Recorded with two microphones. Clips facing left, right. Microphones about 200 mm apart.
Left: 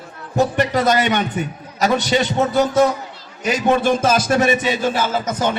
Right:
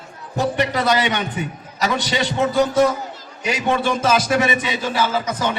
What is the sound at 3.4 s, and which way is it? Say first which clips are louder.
Speech: left 4 dB; 45° left (ahead or behind).